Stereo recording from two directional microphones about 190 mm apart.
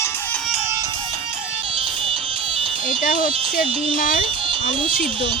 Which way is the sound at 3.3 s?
30° right (ahead or behind).